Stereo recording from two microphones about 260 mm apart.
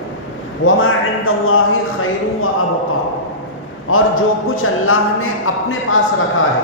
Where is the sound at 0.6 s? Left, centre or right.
Left.